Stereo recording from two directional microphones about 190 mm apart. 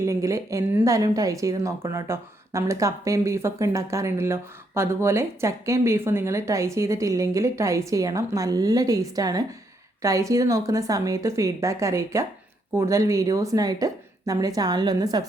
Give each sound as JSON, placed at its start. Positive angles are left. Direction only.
{"t": 0.0, "sound": "a woman's voice", "side_deg": -15}